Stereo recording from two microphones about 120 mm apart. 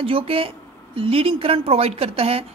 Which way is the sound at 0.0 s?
50° right (ahead or behind).